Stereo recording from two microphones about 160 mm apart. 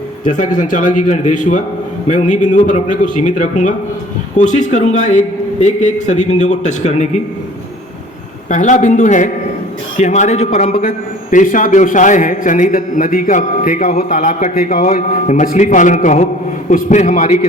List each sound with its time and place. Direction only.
0.3 s a man's voice: 50° left (ahead or behind)
8.4 s a man's voice: 50° left (ahead or behind)